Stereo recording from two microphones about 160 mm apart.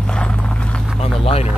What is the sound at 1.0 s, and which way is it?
Speech, 40° left (ahead or behind).